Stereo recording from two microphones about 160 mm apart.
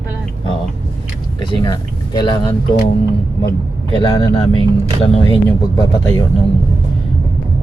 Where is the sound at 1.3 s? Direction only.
30° left (ahead or behind).